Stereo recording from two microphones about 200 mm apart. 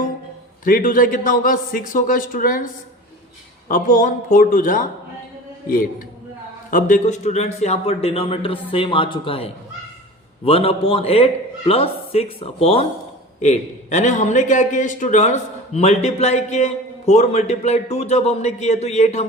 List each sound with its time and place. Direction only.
0.6 s a man's voice: 45° left (ahead or behind)
3.7 s a man's voice: 45° left (ahead or behind)